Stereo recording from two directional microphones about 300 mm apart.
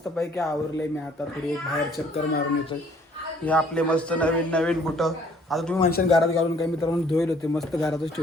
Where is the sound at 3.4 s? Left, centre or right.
Centre.